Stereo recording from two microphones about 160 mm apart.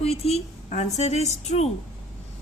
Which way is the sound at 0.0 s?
40° left (ahead or behind).